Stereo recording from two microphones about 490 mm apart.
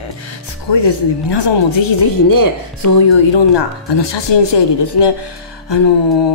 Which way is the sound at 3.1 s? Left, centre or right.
Left.